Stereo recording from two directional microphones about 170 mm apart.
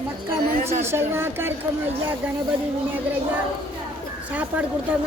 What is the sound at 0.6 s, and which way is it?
Speech, 40° right (ahead or behind).